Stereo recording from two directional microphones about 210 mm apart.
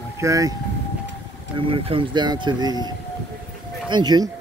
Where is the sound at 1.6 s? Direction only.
25° right (ahead or behind).